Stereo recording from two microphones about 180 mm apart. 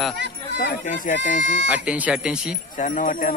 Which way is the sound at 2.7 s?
45° left (ahead or behind).